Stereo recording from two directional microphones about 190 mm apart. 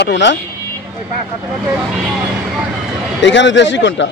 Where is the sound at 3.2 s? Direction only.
70° left (ahead or behind).